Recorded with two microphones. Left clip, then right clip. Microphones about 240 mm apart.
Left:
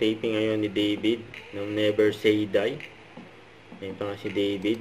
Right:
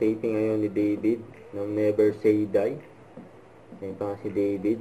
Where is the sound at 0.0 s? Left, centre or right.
Left.